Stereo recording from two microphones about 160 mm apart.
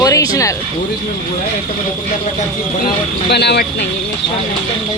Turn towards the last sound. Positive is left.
turn(degrees=90)